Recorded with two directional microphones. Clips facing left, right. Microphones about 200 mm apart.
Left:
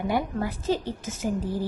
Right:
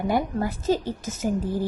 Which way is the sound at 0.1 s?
45° right (ahead or behind).